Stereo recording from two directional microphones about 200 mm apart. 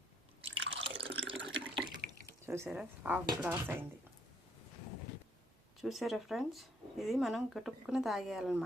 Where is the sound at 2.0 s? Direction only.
50° right (ahead or behind).